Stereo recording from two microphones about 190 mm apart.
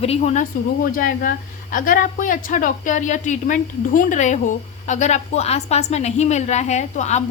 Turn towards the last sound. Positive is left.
turn(degrees=35)  # may be behind; listen again after turning